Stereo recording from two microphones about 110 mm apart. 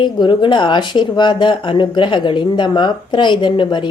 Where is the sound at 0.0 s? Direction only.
45° left (ahead or behind).